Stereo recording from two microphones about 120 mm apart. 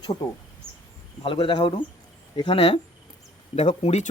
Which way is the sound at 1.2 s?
45° left (ahead or behind).